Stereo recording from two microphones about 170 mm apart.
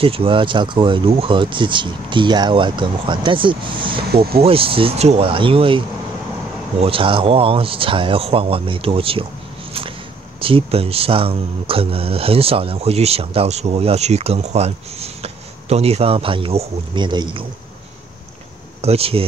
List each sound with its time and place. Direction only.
0.0 s speech: 35° right (ahead or behind)
4.1 s speech: 65° right (ahead or behind)
4.4 s speech: 35° right (ahead or behind)
10.4 s speech: 35° right (ahead or behind)
18.8 s speech: 35° right (ahead or behind)